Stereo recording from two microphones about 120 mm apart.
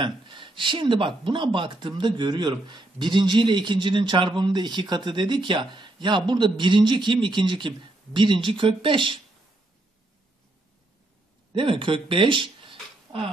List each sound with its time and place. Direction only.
0.0 s speech: 45° right (ahead or behind)
11.5 s speech: 45° right (ahead or behind)